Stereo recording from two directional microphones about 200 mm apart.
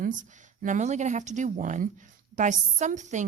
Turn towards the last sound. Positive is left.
turn(degrees=-35)  # may be behind; listen again after turning